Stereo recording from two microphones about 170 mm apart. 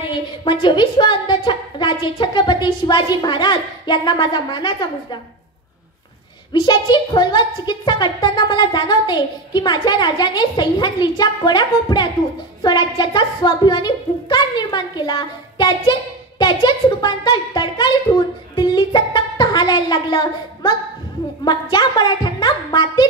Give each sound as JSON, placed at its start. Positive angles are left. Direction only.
{"t": 0.1, "sound": "a woman's voice", "side_deg": 30}
{"t": 6.5, "sound": "a woman's voice", "side_deg": 25}
{"t": 18.5, "sound": "music", "side_deg": 25}
{"t": 21.5, "sound": "a woman's voice", "side_deg": 25}